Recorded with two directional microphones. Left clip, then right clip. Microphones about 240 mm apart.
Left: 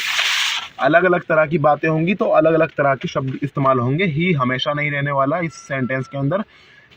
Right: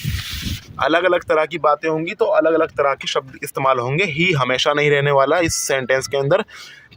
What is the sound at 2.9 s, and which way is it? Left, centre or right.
Speech, right.